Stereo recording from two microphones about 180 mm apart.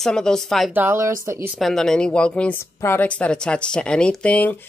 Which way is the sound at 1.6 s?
Centre (ahead or behind).